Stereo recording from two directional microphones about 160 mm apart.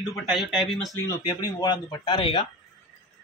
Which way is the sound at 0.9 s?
20° left (ahead or behind).